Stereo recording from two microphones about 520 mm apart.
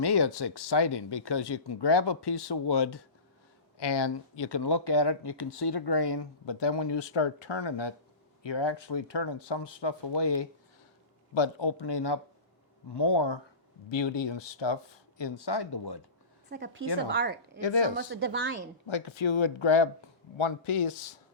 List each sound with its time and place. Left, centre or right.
0.0 s speech: left
16.5 s speech: centre
17.6 s speech: left
17.9 s speech: centre
18.9 s speech: left